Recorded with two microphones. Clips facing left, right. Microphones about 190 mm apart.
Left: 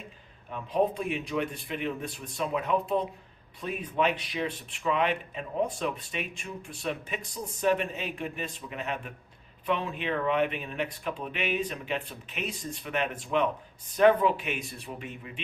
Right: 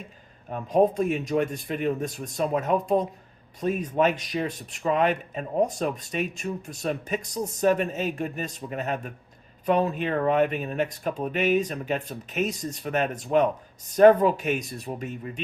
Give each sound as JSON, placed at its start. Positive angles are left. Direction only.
{"t": 0.5, "sound": "speech", "side_deg": -45}